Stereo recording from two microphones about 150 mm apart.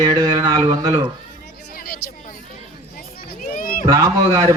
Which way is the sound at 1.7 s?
80° left.